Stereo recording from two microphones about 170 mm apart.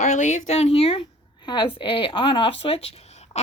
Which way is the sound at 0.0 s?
45° left (ahead or behind).